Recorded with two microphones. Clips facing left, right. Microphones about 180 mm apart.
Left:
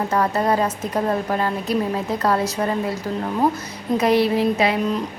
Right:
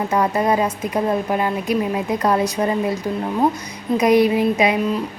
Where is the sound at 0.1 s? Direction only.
10° right (ahead or behind).